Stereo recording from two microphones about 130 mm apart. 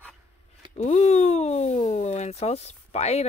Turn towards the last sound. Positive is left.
turn(degrees=55)  # may be behind; listen again after turning